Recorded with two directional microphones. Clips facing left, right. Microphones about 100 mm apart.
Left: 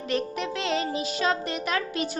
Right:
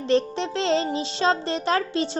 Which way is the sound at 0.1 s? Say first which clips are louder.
Right 6 dB; 30° right (ahead or behind).